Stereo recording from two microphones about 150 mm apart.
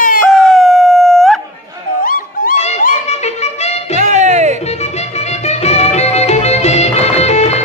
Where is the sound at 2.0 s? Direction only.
65° left (ahead or behind).